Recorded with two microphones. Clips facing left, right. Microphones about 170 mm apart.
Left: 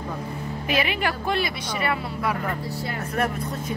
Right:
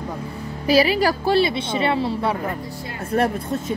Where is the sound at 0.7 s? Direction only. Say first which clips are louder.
Right 8 dB; 35° right (ahead or behind).